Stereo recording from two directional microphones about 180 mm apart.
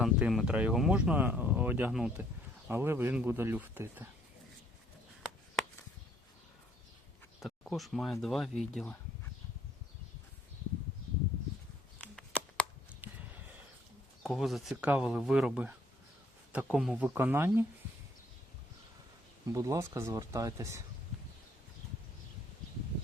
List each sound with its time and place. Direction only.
0.0 s speech: centre (ahead or behind)
7.4 s speech: centre (ahead or behind)
11.9 s a sound: 5° left (ahead or behind)
14.3 s speech: centre (ahead or behind)
19.5 s speech: 15° right (ahead or behind)